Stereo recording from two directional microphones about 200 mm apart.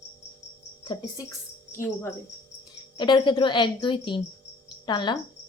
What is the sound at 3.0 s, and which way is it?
Speech, 25° left (ahead or behind).